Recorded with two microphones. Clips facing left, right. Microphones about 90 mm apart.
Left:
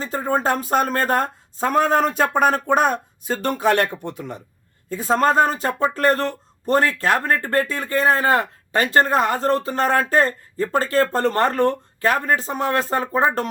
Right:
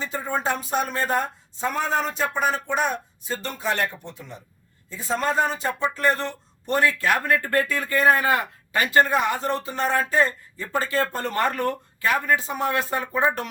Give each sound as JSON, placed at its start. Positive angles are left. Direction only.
{"t": 0.0, "sound": "speech", "side_deg": 40}
{"t": 4.9, "sound": "speech", "side_deg": 50}